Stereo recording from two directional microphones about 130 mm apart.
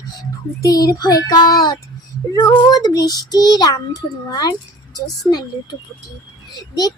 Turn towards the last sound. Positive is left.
turn(degrees=30)  # may be behind; listen again after turning